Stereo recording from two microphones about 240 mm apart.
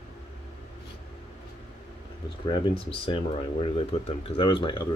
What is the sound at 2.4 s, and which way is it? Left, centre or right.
Speech, left.